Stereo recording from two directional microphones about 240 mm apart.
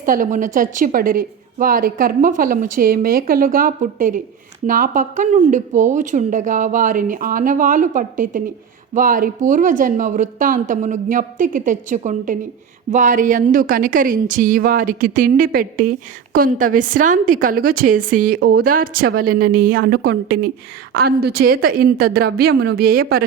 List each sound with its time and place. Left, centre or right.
0.0 s a woman's voice: right